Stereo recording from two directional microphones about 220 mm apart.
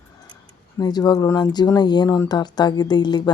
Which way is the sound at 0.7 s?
20° left (ahead or behind).